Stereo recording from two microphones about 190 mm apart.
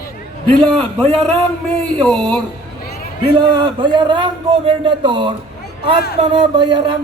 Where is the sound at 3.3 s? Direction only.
25° right (ahead or behind).